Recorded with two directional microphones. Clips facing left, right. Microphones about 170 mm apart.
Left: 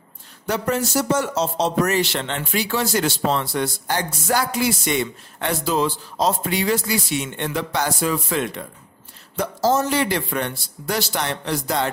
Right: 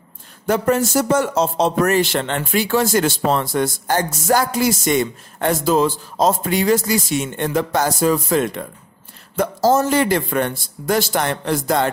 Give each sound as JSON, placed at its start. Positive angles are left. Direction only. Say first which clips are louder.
{"t": 0.5, "sound": "speech", "louder": "right 5 dB", "side_deg": -50}